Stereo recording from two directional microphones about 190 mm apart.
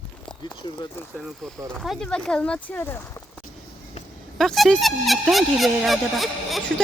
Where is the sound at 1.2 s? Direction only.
Centre (ahead or behind).